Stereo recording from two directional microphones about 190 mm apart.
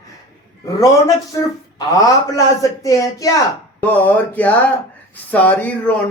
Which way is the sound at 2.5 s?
15° left (ahead or behind).